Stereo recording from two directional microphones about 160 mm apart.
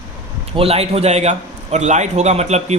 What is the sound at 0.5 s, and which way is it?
A man's voice, 40° right (ahead or behind).